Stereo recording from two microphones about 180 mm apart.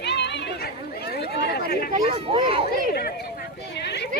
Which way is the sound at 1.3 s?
65° left (ahead or behind).